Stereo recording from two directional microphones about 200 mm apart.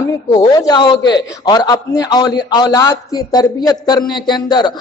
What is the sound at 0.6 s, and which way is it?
A woman's voice, 20° left (ahead or behind).